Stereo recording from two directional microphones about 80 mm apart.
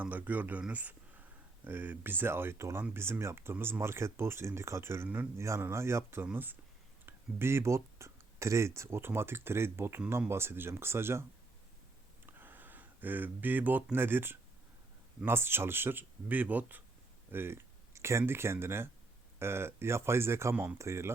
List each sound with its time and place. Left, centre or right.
0.0 s speech: right
5.0 s speech: centre
5.4 s speech: right
12.2 s a sound: right
13.9 s speech: right